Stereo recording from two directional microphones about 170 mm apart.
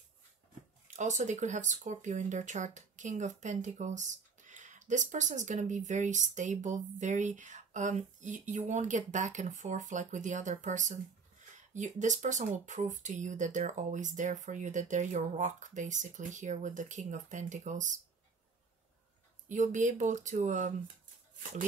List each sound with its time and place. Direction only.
0.8 s speech: 45° right (ahead or behind)
19.5 s speech: 45° right (ahead or behind)